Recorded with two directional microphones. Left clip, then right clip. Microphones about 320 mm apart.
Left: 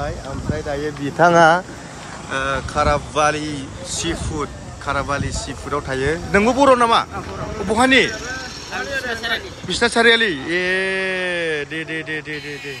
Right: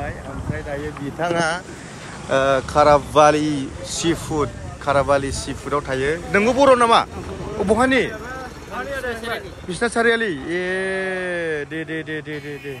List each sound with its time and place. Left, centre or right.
1.2 s speech: left
2.3 s speech: centre
9.2 s speech: centre